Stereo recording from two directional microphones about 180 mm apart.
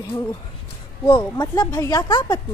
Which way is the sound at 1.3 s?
20° left (ahead or behind).